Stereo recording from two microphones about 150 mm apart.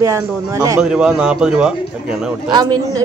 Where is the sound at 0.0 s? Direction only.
20° right (ahead or behind).